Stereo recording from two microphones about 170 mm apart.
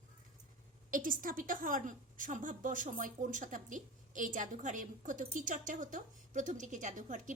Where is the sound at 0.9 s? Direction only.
55° right (ahead or behind).